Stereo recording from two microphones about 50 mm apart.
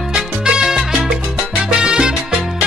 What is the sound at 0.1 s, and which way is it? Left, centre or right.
Salsa music, centre.